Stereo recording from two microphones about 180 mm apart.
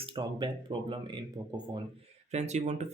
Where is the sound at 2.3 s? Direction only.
40° right (ahead or behind).